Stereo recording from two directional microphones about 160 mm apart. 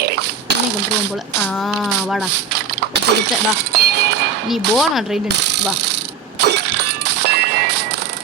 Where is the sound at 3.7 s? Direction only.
90° right.